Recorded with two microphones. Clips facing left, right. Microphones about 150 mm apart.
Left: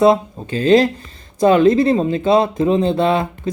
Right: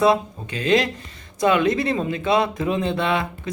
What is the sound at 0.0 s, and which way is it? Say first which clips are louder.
Speech: left 5 dB; 30° left (ahead or behind).